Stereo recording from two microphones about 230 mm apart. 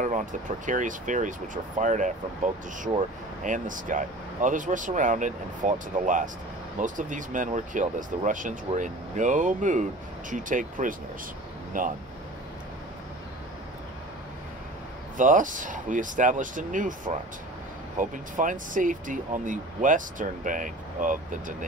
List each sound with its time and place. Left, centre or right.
0.7 s speech: right
15.1 s speech: right